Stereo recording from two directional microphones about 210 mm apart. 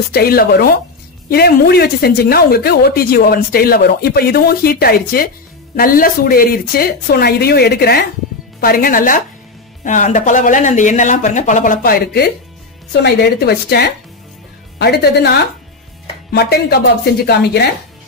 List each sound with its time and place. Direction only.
0.1 s speech: 45° left (ahead or behind)